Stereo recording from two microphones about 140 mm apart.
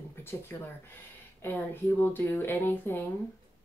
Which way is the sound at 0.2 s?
15° left (ahead or behind).